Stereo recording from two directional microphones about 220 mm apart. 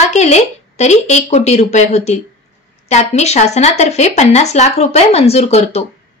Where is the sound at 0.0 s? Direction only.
30° left (ahead or behind).